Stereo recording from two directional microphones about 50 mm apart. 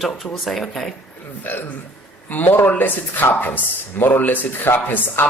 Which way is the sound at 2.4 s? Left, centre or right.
Left.